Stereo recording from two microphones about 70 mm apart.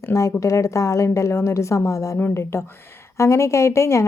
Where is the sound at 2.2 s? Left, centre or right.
Left.